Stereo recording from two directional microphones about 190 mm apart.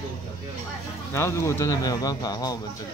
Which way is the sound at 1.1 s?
15° left (ahead or behind).